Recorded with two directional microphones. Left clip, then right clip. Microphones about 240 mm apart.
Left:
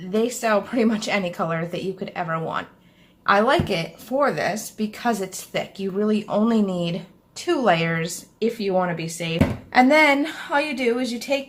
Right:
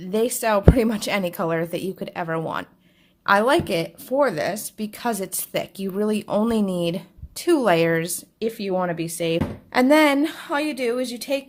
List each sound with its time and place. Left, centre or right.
0.1 s a woman's voice: right